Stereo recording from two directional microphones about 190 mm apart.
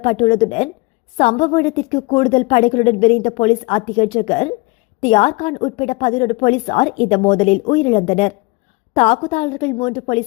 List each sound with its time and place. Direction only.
0.0 s speech: 30° left (ahead or behind)